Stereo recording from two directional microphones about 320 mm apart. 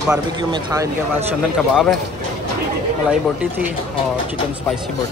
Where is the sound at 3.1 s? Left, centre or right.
Centre.